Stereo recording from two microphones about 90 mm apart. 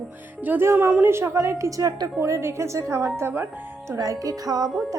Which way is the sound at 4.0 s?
40° right (ahead or behind).